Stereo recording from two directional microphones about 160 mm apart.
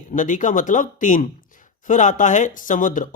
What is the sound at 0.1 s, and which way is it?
A man's voice, 55° left (ahead or behind).